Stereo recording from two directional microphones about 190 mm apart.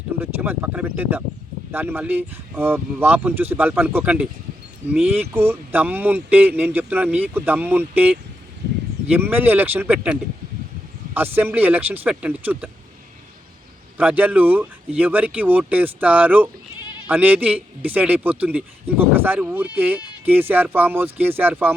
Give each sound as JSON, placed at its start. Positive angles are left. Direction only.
{"t": 0.2, "sound": "a man's voice", "side_deg": -10}
{"t": 14.0, "sound": "a man's voice", "side_deg": -10}